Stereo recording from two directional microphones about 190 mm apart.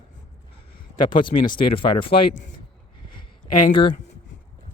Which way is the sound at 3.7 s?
25° left (ahead or behind).